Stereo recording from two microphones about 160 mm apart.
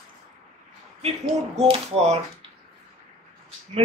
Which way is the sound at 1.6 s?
40° right (ahead or behind).